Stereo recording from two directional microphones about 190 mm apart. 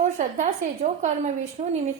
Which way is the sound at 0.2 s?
40° right (ahead or behind).